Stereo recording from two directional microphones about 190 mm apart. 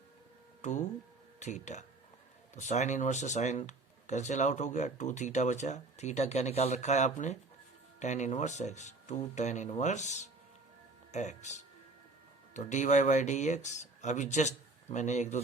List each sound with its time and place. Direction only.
0.6 s speech: 40° left (ahead or behind)